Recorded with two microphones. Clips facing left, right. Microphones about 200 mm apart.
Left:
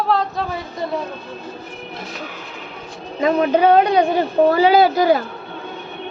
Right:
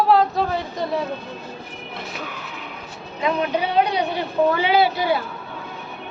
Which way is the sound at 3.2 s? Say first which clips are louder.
Left 6 dB; 40° left (ahead or behind).